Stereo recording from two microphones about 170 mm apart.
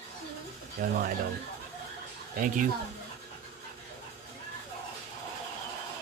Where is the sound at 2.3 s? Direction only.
50° right (ahead or behind).